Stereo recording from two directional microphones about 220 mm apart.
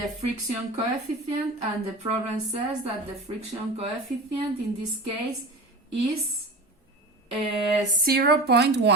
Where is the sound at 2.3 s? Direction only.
30° right (ahead or behind).